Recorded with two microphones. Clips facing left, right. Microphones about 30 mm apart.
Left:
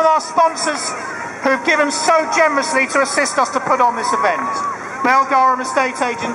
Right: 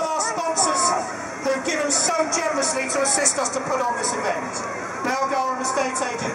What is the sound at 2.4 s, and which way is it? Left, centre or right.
A woman's voice, left.